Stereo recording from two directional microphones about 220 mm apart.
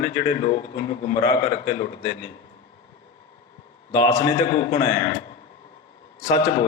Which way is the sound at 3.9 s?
20° left (ahead or behind).